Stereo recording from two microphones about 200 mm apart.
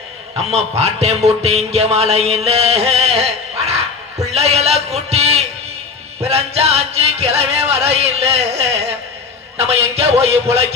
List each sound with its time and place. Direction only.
0.3 s music: 30° right (ahead or behind)
4.3 s speech: 30° right (ahead or behind)
6.2 s music: 30° right (ahead or behind)